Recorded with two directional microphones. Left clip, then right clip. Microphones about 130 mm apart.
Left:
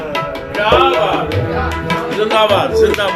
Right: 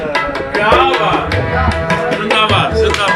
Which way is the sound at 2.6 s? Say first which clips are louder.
Even; 65° left (ahead or behind).